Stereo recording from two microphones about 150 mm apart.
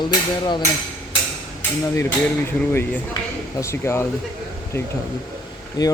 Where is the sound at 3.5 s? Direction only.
20° left (ahead or behind).